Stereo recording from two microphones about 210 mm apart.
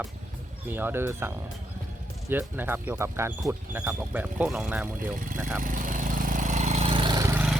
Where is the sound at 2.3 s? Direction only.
10° right (ahead or behind).